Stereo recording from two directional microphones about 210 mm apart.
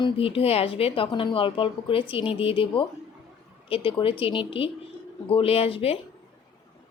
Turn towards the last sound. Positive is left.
turn(degrees=25)  # may be behind; listen again after turning